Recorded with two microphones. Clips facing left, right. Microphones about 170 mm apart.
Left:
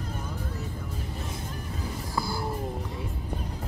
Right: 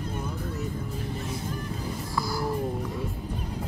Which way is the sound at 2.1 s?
25° left (ahead or behind).